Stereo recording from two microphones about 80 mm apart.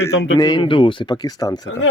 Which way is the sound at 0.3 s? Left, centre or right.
Left.